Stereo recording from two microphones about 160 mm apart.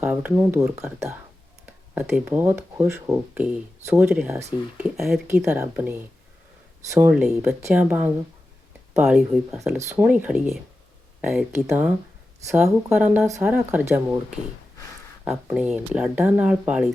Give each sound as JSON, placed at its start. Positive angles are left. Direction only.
{"t": 0.0, "sound": "speech", "side_deg": -10}
{"t": 4.8, "sound": "speech", "side_deg": -5}
{"t": 7.1, "sound": "speech", "side_deg": -5}
{"t": 15.2, "sound": "speech", "side_deg": -10}